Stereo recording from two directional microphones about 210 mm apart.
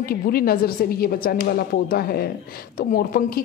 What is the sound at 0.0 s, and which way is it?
A woman's voice, 45° left (ahead or behind).